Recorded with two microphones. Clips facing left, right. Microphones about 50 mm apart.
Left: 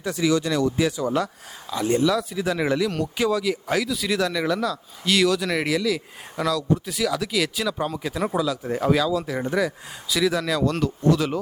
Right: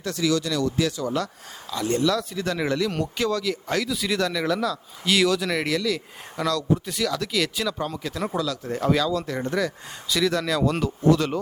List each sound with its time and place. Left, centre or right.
0.0 s a man's voice: centre